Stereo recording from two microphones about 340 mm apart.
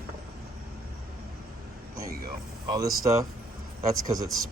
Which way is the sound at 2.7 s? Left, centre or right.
Centre.